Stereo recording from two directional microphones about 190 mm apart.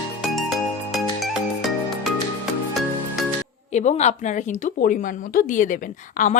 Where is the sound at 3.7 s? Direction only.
40° left (ahead or behind).